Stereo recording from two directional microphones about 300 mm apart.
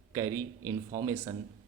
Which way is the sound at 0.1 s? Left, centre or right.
Centre.